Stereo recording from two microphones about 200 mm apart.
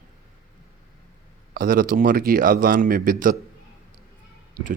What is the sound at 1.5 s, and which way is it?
A man's voice, 45° right (ahead or behind).